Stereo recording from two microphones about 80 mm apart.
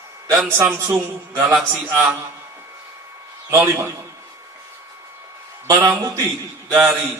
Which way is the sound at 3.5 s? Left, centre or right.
Right.